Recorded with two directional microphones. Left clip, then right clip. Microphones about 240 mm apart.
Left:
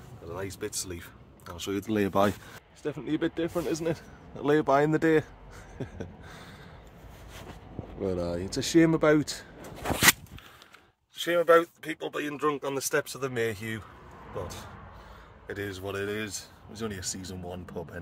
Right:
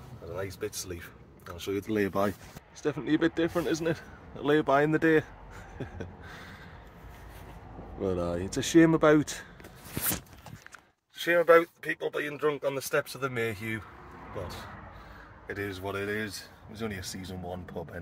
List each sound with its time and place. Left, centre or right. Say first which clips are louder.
0.3 s speech: even; centre
2.8 s speech: right 3 dB; centre
3.8 s speech: even; centre
5.8 s a sound: left 2 dB; centre
8.0 s speech: even; centre
11.1 s speech: even; centre
15.4 s speech: even; centre